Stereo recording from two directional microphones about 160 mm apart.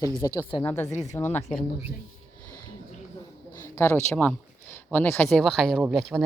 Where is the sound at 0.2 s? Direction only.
15° left (ahead or behind).